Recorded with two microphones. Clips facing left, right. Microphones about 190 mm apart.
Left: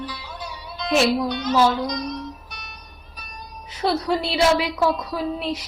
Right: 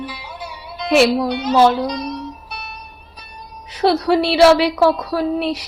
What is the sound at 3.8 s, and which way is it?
A woman's voice, 70° right (ahead or behind).